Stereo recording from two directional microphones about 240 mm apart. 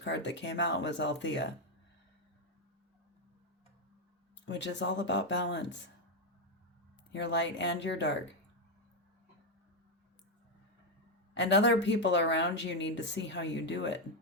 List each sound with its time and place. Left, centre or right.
0.0 s speech: left
4.4 s speech: left
7.1 s speech: left
11.3 s speech: left